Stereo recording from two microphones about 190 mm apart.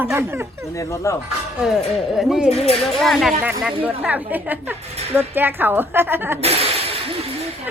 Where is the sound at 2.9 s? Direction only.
Centre (ahead or behind).